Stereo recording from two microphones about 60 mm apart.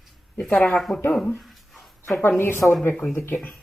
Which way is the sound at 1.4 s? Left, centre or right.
Centre.